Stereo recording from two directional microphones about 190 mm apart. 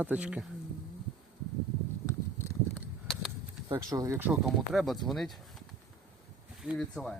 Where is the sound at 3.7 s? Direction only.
20° right (ahead or behind).